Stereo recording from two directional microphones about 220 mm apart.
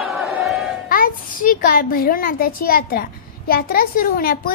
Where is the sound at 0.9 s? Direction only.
40° left (ahead or behind).